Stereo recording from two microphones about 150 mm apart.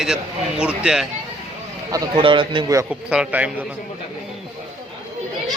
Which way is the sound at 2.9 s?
5° right (ahead or behind).